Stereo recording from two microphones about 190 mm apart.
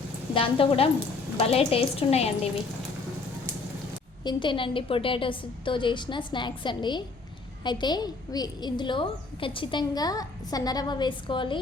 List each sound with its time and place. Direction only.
0.3 s a woman's voice: 30° left (ahead or behind)
4.2 s a woman's voice: 25° left (ahead or behind)